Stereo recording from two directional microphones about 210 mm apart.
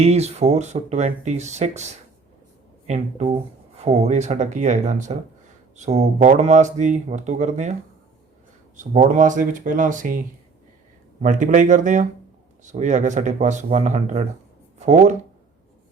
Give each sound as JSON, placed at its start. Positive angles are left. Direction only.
{"t": 0.0, "sound": "speech", "side_deg": -30}
{"t": 8.7, "sound": "speech", "side_deg": -35}
{"t": 11.2, "sound": "speech", "side_deg": -35}